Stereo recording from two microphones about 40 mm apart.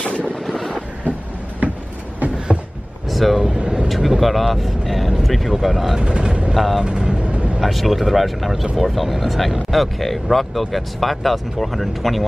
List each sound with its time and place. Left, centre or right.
0.0 s boat: left
3.1 s speech: centre
3.5 s vehicle: right
3.9 s speech: centre
5.9 s speech: right
6.5 s speech: centre
6.8 s vehicle: centre
7.6 s speech: centre